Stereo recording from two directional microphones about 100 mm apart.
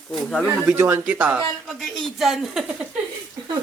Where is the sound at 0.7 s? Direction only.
25° right (ahead or behind).